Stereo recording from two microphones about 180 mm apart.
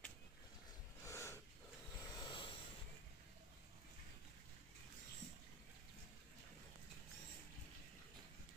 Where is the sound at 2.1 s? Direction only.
25° left (ahead or behind).